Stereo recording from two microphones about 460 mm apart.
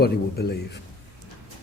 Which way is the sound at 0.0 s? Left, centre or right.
Left.